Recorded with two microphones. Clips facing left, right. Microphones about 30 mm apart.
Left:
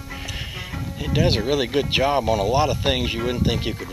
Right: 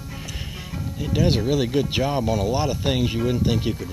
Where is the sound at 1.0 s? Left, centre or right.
Left.